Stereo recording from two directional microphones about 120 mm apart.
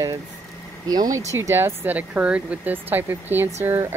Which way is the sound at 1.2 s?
25° right (ahead or behind).